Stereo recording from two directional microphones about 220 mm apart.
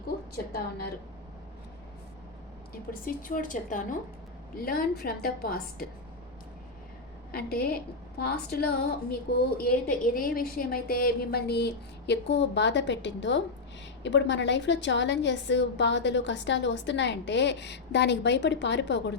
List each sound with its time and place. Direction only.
3.2 s a woman's voice: 40° left (ahead or behind)
7.3 s a woman's voice: 45° left (ahead or behind)